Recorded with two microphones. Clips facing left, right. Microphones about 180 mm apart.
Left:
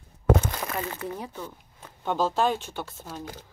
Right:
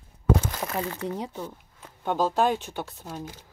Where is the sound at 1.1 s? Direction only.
20° right (ahead or behind).